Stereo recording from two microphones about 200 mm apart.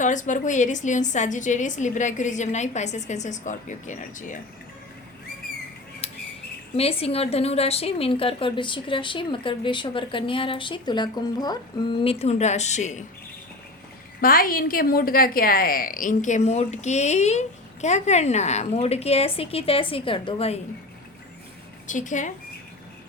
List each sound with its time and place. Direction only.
0.0 s a woman's voice: 40° left (ahead or behind)
6.0 s bird: 30° left (ahead or behind)
6.7 s a woman's voice: 30° left (ahead or behind)
14.2 s a woman's voice: 45° left (ahead or behind); by 20.6 s 30° left (ahead or behind)
21.8 s a woman's voice: 40° left (ahead or behind)